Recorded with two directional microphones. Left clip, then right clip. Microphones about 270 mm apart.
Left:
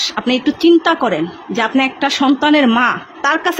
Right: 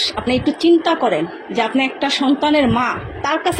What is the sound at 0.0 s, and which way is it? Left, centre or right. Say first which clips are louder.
A woman's voice: left 2 dB; left.